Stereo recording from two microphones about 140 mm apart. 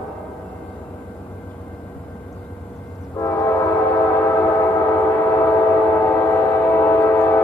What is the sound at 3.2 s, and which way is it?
Train, 20° left (ahead or behind).